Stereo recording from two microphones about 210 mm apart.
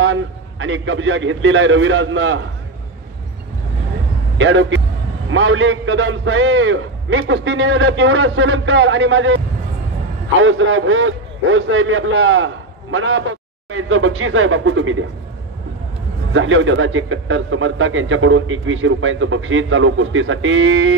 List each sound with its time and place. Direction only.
0.0 s a man's voice: 65° right (ahead or behind)
4.4 s a man's voice: 65° right (ahead or behind)
16.3 s a man's voice: 65° right (ahead or behind)